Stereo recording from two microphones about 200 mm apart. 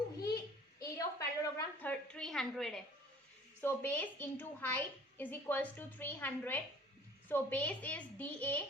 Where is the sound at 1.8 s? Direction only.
5° left (ahead or behind).